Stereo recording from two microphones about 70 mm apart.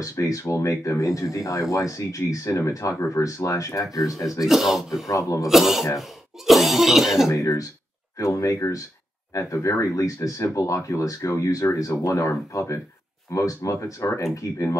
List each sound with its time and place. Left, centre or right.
0.0 s speech: left
4.5 s speech: centre
5.0 s speech: left
5.5 s speech: centre
7.2 s speech: left